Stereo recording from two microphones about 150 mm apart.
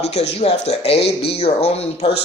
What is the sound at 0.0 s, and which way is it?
Speech, 45° left (ahead or behind).